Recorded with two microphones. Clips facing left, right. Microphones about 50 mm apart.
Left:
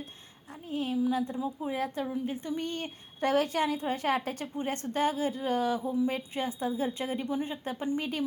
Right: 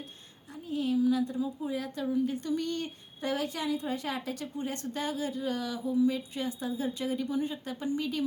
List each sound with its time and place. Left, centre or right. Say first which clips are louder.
0.7 s a sound: right 2 dB; left
1.1 s speech: right 1 dB; left
2.0 s speech: right 4 dB; left
3.2 s speech: left 6 dB; left